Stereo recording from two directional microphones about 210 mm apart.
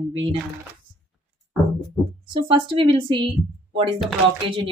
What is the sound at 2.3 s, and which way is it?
Speech, 25° right (ahead or behind).